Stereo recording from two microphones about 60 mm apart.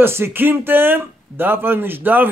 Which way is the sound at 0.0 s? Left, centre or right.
Right.